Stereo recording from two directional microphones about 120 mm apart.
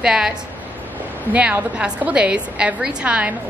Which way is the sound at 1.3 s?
10° right (ahead or behind).